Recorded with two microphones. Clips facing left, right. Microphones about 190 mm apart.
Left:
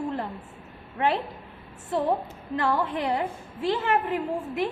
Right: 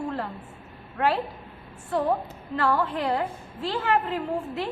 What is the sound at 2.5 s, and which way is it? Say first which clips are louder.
A woman's voice: right 1 dB; 15° left (ahead or behind).